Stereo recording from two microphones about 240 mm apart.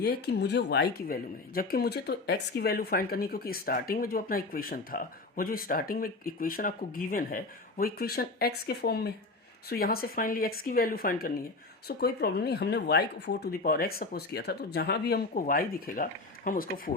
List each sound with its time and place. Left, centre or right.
0.0 s speech: left